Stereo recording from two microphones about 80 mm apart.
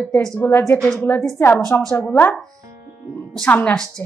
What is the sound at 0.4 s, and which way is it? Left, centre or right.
Speech, left.